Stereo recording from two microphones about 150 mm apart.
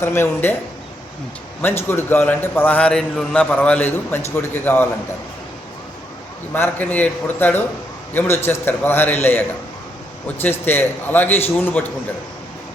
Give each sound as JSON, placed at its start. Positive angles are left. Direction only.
{"t": 0.0, "sound": "a man's voice", "side_deg": 15}
{"t": 1.6, "sound": "a man's voice", "side_deg": 15}
{"t": 6.5, "sound": "a man's voice", "side_deg": 10}